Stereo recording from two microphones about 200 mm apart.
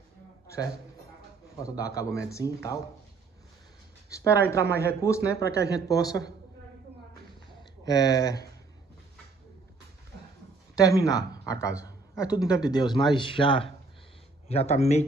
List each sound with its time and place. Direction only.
1.6 s speech: 15° left (ahead or behind)
4.1 s speech: 15° left (ahead or behind)
7.8 s speech: 20° left (ahead or behind)
10.8 s speech: 15° left (ahead or behind)
11.8 s a sound: 15° left (ahead or behind)
12.4 s speech: 20° left (ahead or behind)